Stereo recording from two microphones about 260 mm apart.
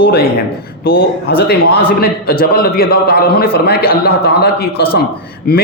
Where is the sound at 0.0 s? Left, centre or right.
Left.